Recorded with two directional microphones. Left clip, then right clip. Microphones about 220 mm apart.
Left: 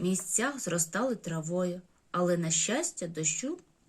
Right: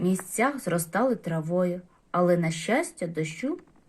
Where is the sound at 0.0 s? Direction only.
15° left (ahead or behind).